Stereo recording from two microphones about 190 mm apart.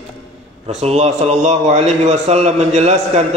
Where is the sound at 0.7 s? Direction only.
35° right (ahead or behind).